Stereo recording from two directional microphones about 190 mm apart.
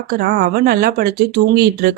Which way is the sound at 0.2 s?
55° right (ahead or behind).